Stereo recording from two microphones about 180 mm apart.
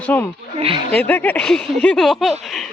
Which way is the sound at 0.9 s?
10° left (ahead or behind).